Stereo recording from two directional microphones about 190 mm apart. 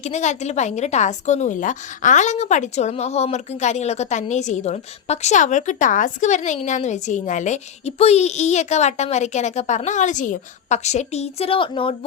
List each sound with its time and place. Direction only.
0.0 s a woman's voice: 35° left (ahead or behind)